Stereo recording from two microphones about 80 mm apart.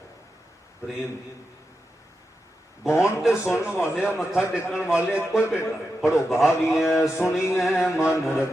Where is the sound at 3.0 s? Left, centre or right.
Centre.